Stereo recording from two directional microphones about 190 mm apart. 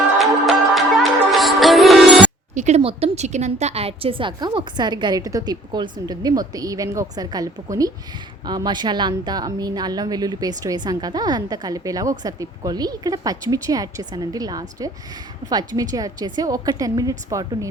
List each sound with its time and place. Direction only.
0.2 s music: centre (ahead or behind)
2.6 s a woman's voice: 35° right (ahead or behind); by 17.7 s 20° right (ahead or behind)